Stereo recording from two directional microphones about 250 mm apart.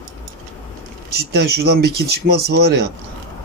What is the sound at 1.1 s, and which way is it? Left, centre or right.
Speech, right.